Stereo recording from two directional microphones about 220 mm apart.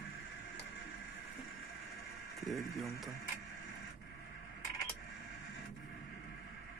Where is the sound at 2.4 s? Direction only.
Centre (ahead or behind).